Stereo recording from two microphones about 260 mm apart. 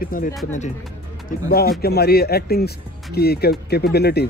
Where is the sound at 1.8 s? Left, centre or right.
Left.